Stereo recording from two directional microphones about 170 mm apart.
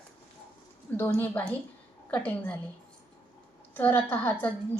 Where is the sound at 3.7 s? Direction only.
10° left (ahead or behind).